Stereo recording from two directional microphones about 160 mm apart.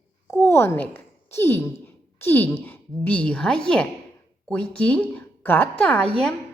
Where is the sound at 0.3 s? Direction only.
15° left (ahead or behind).